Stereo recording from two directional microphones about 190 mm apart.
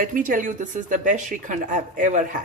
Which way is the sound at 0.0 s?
45° right (ahead or behind).